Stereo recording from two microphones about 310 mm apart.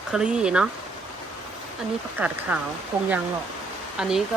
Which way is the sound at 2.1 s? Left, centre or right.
Centre.